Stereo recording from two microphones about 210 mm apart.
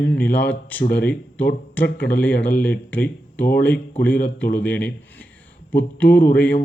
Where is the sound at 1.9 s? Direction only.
50° left (ahead or behind).